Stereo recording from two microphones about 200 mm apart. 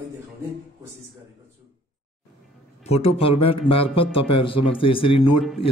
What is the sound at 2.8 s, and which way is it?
A man's voice, 30° left (ahead or behind).